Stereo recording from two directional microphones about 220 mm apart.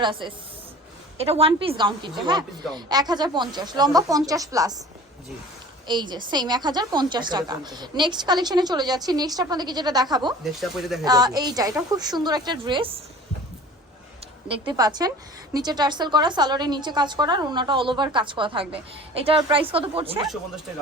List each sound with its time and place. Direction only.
0.0 s a woman's voice: 20° right (ahead or behind)
5.9 s a woman's voice: 20° right (ahead or behind)
10.4 s speech: centre (ahead or behind)
11.0 s a woman's voice: 15° right (ahead or behind)
14.7 s a woman's voice: 15° right (ahead or behind)